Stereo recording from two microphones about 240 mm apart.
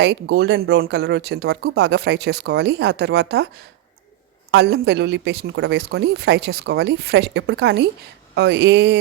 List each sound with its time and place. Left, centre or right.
0.0 s speech: right
4.5 s speech: right